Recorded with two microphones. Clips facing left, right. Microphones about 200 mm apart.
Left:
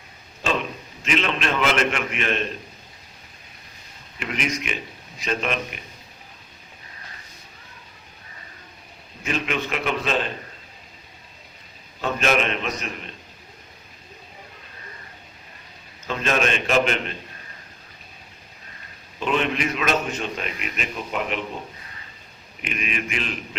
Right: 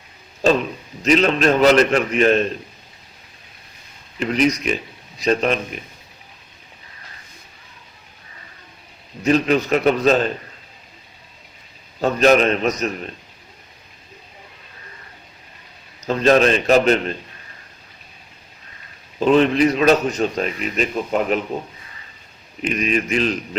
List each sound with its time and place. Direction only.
0.4 s a man's voice: 40° right (ahead or behind)
4.2 s a man's voice: 35° right (ahead or behind)
9.2 s a man's voice: 35° right (ahead or behind)
11.9 s a man's voice: 40° right (ahead or behind)
16.0 s a man's voice: 35° right (ahead or behind)
19.2 s a man's voice: 35° right (ahead or behind)
22.6 s a man's voice: 40° right (ahead or behind)